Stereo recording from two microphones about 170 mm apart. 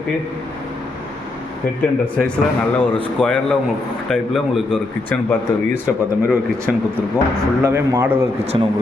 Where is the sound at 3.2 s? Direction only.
5° left (ahead or behind).